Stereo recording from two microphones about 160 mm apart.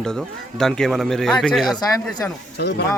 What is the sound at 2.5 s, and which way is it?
Speech, 90° left.